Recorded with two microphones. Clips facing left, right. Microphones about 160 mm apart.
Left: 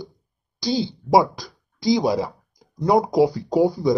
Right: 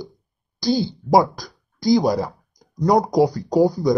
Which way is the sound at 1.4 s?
Centre (ahead or behind).